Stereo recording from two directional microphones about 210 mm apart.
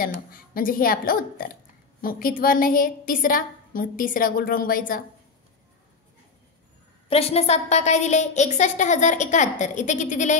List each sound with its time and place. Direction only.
0.0 s a woman's voice: 45° left (ahead or behind)
7.1 s a woman's voice: 30° left (ahead or behind)